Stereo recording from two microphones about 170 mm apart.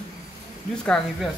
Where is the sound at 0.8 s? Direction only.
5° left (ahead or behind).